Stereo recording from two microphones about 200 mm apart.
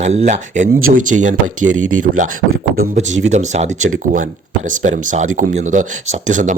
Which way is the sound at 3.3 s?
35° right (ahead or behind).